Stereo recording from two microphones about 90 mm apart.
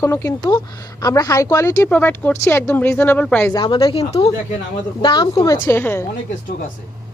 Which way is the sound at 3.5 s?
65° left (ahead or behind).